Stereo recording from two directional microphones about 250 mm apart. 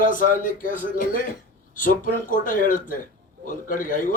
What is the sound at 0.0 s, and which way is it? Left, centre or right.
A man's voice, left.